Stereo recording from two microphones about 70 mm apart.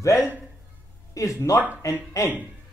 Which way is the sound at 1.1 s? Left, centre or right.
Left.